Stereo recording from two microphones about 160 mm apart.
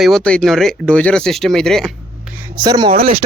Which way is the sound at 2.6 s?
25° right (ahead or behind).